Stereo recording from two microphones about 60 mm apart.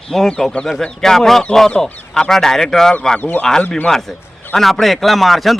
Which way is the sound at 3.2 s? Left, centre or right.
Left.